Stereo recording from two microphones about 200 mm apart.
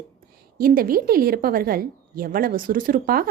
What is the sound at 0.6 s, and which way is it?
Speech, 45° right (ahead or behind).